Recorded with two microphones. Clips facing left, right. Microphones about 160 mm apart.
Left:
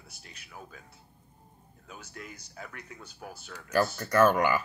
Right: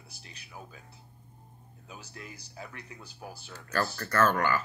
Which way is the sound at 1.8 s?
30° right (ahead or behind).